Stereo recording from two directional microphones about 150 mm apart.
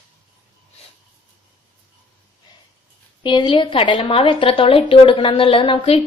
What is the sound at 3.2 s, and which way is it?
A woman's voice, 30° left (ahead or behind).